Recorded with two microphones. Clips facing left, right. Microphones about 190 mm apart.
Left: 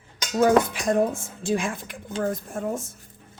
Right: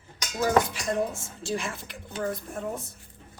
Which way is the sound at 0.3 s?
55° left (ahead or behind).